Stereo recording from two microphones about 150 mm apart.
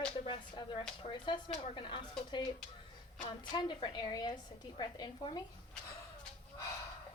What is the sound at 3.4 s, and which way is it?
A woman's voice, 30° left (ahead or behind).